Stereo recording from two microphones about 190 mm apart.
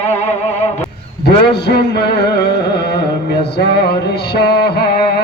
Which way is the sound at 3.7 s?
55° left (ahead or behind).